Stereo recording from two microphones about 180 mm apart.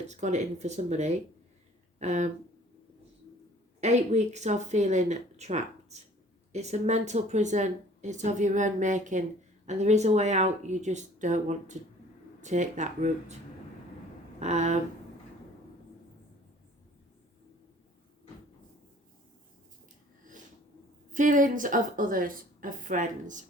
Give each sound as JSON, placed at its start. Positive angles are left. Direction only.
{"t": 0.1, "sound": "speech", "side_deg": -40}
{"t": 3.8, "sound": "a woman's voice", "side_deg": -40}
{"t": 14.3, "sound": "speech", "side_deg": -40}
{"t": 21.1, "sound": "a woman's voice", "side_deg": -45}